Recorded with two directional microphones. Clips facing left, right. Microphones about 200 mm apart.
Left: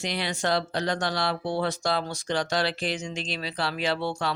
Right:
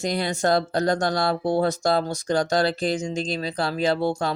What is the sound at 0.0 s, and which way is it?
Speech, 45° right (ahead or behind).